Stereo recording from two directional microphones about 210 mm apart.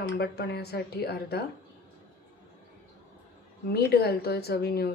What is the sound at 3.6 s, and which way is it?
A woman's voice, 50° left (ahead or behind).